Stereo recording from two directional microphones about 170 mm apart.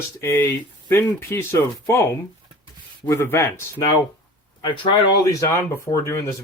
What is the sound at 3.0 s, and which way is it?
Speech, 15° left (ahead or behind).